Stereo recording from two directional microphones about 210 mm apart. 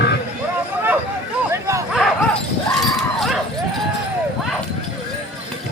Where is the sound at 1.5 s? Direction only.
15° right (ahead or behind).